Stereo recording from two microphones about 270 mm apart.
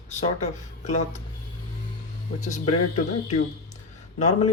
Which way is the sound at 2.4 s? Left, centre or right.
Left.